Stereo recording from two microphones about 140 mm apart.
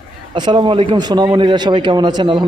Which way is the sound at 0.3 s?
35° right (ahead or behind).